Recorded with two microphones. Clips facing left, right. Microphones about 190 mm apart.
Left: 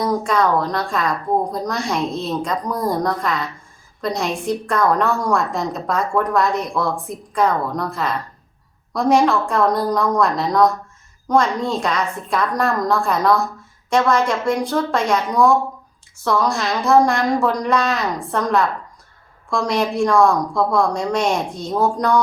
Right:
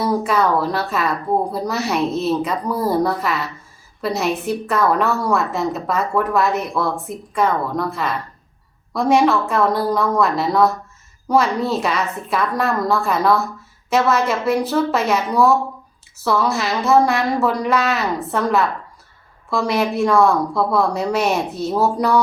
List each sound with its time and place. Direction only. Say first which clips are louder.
0.0 s a woman's voice: even; 5° right (ahead or behind)